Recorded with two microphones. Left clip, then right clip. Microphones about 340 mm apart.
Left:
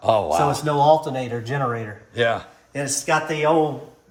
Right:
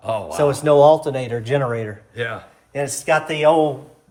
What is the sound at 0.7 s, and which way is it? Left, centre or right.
Speech, right.